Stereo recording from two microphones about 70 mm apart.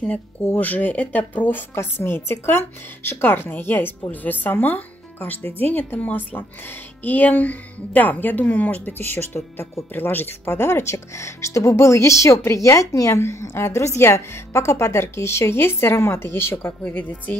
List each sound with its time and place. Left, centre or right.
0.6 s a woman's voice: left
16.8 s a woman's voice: left